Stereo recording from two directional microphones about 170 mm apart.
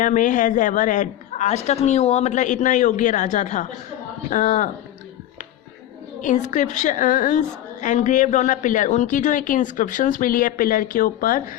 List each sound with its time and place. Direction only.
0.0 s a woman's voice: 50° left (ahead or behind)
6.2 s a woman's voice: 45° left (ahead or behind)